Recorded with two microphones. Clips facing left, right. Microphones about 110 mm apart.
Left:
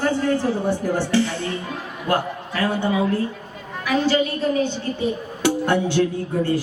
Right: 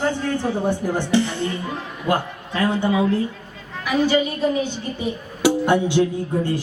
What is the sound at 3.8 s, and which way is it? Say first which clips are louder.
Music: right 1 dB; 15° right (ahead or behind).